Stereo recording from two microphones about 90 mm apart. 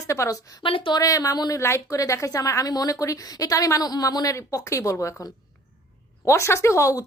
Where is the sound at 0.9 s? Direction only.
40° left (ahead or behind).